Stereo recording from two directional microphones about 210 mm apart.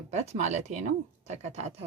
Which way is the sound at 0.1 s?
35° right (ahead or behind).